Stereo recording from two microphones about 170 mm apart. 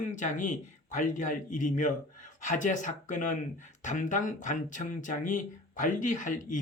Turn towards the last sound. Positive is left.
turn(degrees=50)  # may be behind; listen again after turning